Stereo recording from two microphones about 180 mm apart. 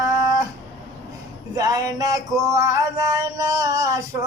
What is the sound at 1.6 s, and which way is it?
Male singing, 20° right (ahead or behind).